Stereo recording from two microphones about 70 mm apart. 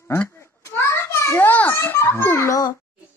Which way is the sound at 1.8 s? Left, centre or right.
Left.